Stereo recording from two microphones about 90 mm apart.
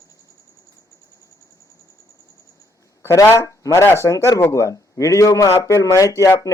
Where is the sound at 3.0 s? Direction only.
30° left (ahead or behind).